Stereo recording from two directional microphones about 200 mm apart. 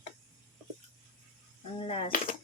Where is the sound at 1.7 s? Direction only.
30° left (ahead or behind).